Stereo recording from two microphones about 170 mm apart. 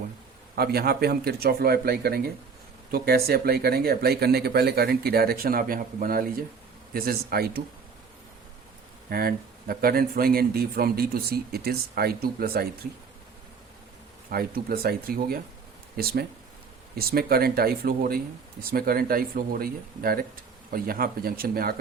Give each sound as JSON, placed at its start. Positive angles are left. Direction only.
{"t": 0.5, "sound": "speech", "side_deg": -65}
{"t": 9.0, "sound": "speech", "side_deg": -60}
{"t": 14.3, "sound": "speech", "side_deg": -60}